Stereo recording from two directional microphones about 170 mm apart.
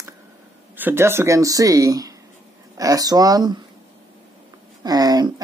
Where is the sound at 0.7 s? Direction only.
10° right (ahead or behind).